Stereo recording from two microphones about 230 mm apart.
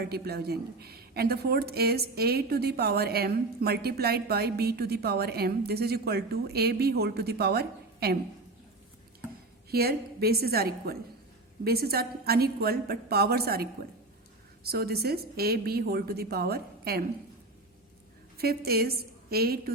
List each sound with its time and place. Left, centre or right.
0.0 s a woman's voice: right
9.6 s a woman's voice: right
18.3 s a woman's voice: right